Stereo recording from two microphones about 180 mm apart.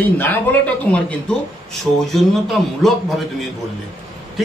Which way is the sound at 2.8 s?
Centre (ahead or behind).